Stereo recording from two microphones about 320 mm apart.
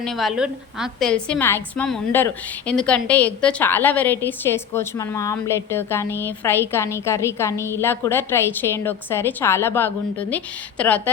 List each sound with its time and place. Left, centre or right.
0.0 s a woman's voice: centre